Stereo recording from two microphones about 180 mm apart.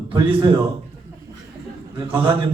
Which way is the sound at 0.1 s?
30° right (ahead or behind).